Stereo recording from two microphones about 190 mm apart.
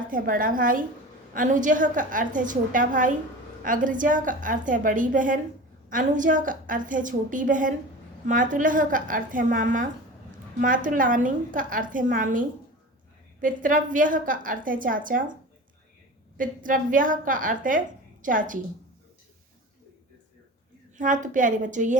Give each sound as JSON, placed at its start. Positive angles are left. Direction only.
{"t": 0.1, "sound": "a woman's voice", "side_deg": -45}
{"t": 16.4, "sound": "a woman's voice", "side_deg": -45}
{"t": 21.0, "sound": "a woman's voice", "side_deg": -45}